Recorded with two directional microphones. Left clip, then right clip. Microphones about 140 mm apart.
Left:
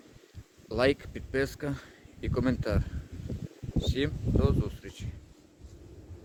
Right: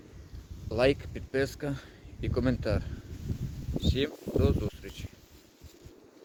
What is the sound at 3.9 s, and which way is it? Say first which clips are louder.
Speech: right 2 dB; 20° left (ahead or behind).